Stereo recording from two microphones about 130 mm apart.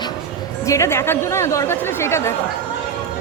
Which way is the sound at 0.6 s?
25° left (ahead or behind).